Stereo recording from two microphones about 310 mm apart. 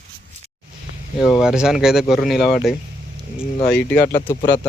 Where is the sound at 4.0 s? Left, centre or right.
Left.